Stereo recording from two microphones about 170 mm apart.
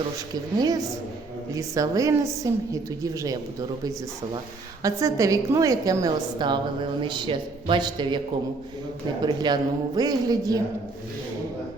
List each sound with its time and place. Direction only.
1.5 s a woman's voice: 20° right (ahead or behind)
4.8 s a woman's voice: 20° right (ahead or behind)
9.2 s a woman's voice: 25° right (ahead or behind)